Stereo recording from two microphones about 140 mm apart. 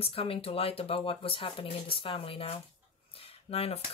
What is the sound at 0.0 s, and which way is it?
Speech, 45° left (ahead or behind).